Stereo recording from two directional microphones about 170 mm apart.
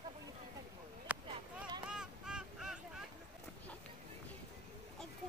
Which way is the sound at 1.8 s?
5° right (ahead or behind).